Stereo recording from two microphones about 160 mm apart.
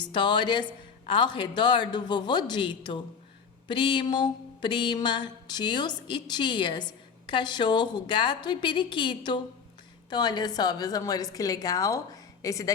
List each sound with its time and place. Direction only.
0.0 s mantra: 30° left (ahead or behind)